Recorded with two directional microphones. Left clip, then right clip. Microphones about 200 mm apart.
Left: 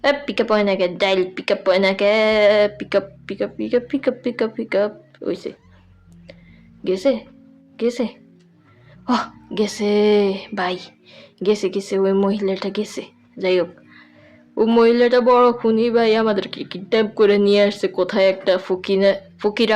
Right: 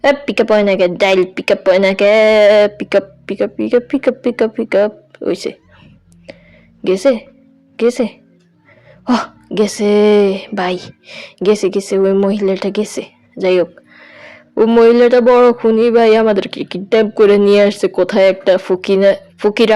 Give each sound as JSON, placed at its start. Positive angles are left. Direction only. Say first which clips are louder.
{"t": 0.0, "sound": "a woman's voice", "louder": "right 6 dB", "side_deg": -30}
{"t": 6.3, "sound": "a sound", "louder": "right 9 dB", "side_deg": -30}
{"t": 6.8, "sound": "a woman's voice", "louder": "right 6 dB", "side_deg": -30}